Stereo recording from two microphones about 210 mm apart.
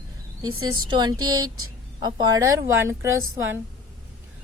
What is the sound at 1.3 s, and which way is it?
Speech, 85° right.